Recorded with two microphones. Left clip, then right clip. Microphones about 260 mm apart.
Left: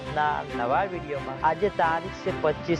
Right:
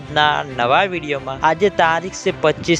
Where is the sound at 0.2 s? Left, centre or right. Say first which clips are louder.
Right 10 dB; right.